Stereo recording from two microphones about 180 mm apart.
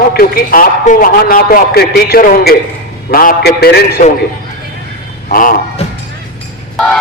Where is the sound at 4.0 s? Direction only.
50° left (ahead or behind).